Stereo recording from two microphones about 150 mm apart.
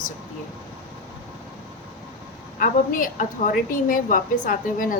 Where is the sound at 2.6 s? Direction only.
65° left (ahead or behind).